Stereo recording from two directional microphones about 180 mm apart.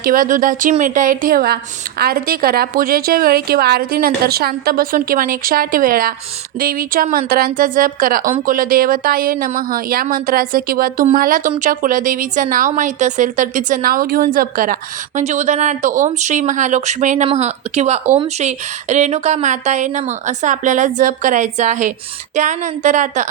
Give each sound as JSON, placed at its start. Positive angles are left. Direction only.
{"t": 0.0, "sound": "a woman's voice", "side_deg": -50}